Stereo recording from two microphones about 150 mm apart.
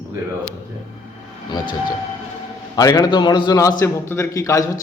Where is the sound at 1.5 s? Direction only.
30° left (ahead or behind).